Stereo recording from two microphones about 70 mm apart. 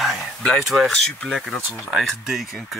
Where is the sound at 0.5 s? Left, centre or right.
Centre.